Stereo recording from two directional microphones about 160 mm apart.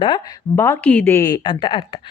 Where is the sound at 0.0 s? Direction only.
30° left (ahead or behind).